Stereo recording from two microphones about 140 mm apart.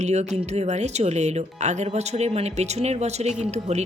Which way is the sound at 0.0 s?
55° right (ahead or behind).